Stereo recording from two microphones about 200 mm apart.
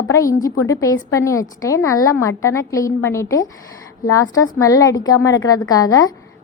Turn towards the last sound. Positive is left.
turn(degrees=20)  # may be behind; listen again after turning